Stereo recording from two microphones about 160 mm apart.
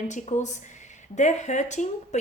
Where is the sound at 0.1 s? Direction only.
50° left (ahead or behind).